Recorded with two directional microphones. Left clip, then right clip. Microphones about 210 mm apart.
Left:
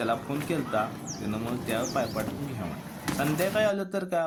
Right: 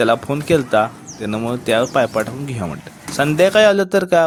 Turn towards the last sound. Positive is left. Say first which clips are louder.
# right 15 dB
turn(degrees=60)  # may be behind; listen again after turning